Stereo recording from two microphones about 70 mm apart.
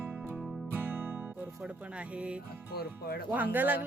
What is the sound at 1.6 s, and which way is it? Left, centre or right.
Speech, centre.